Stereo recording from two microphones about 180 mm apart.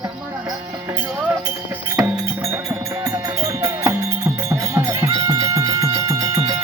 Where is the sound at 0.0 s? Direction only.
20° right (ahead or behind).